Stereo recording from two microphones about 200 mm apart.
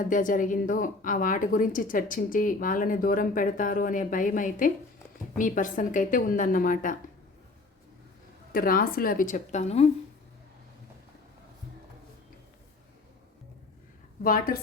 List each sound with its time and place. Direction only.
0.0 s a woman's voice: 40° left (ahead or behind)
8.5 s a woman's voice: 45° left (ahead or behind)
14.3 s a woman's voice: 45° left (ahead or behind)